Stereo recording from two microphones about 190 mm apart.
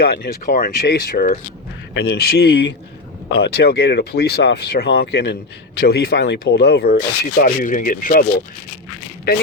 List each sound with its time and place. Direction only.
0.0 s speech: 55° left (ahead or behind)
1.9 s speech: 60° left (ahead or behind)